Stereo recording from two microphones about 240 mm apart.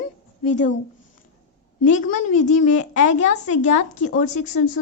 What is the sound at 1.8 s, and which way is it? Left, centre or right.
A woman's voice, left.